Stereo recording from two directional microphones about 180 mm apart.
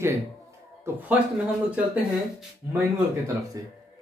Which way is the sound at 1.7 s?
5° right (ahead or behind).